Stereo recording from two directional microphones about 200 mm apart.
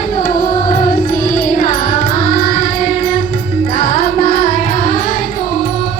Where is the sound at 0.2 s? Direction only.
45° left (ahead or behind).